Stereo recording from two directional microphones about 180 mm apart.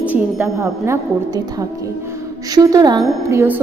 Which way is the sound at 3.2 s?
15° right (ahead or behind).